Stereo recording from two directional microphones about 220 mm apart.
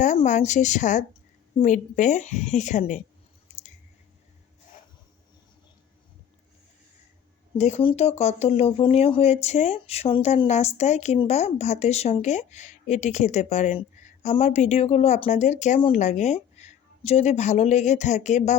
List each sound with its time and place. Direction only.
0.0 s speech: 35° left (ahead or behind)
3.5 s a sound: 35° left (ahead or behind)
7.6 s speech: 25° left (ahead or behind)